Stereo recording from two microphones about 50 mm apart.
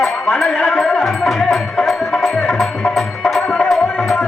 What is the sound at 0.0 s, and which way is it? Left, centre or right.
Music, centre.